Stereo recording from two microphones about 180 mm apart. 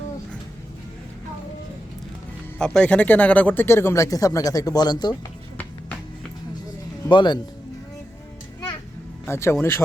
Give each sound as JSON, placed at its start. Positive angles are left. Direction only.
{"t": 2.6, "sound": "speech", "side_deg": 5}
{"t": 7.1, "sound": "speech", "side_deg": 25}
{"t": 9.2, "sound": "speech", "side_deg": 15}